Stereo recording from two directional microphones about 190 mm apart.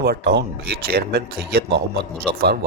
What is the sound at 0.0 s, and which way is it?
Speech, 60° right (ahead or behind).